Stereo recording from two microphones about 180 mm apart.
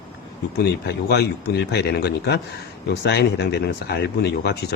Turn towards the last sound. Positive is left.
turn(degrees=65)  # may be behind; listen again after turning